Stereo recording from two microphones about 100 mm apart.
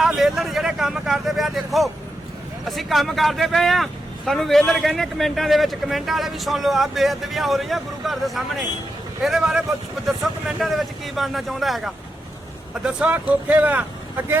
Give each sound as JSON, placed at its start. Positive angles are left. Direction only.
{"t": 0.0, "sound": "a man's voice", "side_deg": -5}